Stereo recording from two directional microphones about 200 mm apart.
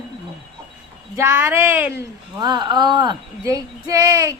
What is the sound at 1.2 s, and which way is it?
Speech, 15° right (ahead or behind).